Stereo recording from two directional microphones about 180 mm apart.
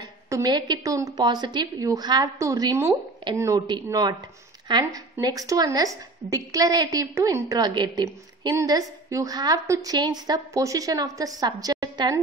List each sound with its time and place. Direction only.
0.0 s a woman's voice: 20° right (ahead or behind)